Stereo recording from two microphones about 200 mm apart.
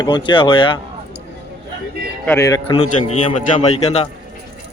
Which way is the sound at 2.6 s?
30° left (ahead or behind).